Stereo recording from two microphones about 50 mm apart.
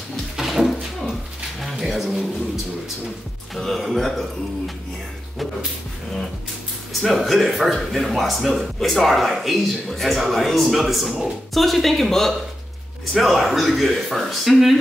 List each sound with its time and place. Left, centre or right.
0.4 s a sound: centre
3.5 s speech: centre
6.9 s speech: centre